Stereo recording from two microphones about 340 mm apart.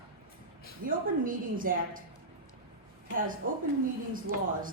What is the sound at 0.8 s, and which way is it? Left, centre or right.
A woman's voice, right.